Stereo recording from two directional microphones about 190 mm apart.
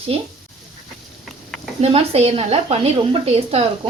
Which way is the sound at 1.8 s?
30° right (ahead or behind).